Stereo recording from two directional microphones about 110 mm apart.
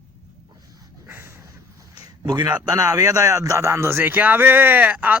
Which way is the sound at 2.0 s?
45° right (ahead or behind).